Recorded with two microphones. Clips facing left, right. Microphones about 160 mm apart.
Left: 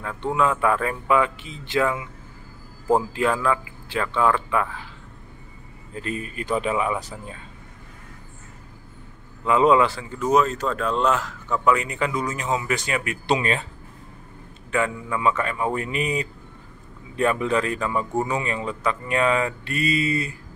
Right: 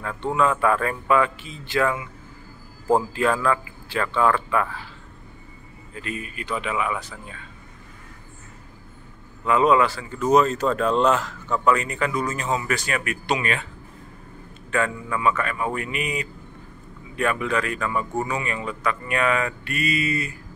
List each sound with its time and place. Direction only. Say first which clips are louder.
0.2 s speech: even; 10° left (ahead or behind)
3.1 s speech: even; 15° left (ahead or behind)
5.9 s speech: left 3 dB; 35° left (ahead or behind)
9.5 s speech: left 1 dB; 20° left (ahead or behind)
10.1 s speech: right 2 dB; 5° left (ahead or behind); by 13.7 s 30° left (ahead or behind)
14.7 s speech: even; 15° left (ahead or behind)